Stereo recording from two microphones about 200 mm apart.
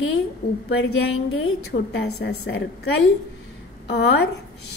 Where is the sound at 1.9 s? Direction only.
55° left (ahead or behind).